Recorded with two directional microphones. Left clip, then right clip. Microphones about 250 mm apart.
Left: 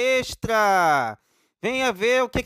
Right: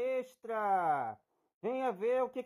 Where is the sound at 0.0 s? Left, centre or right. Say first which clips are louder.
Left 14 dB; left.